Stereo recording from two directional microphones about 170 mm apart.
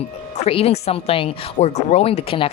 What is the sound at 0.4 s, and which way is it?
Speech, 35° left (ahead or behind).